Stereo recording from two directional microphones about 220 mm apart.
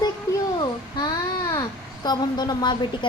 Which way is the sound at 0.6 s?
20° left (ahead or behind).